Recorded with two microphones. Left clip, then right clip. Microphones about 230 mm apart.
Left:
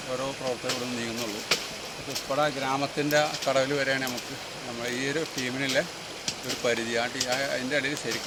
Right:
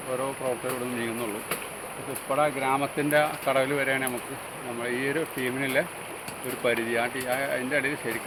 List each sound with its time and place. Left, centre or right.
2.3 s speech: left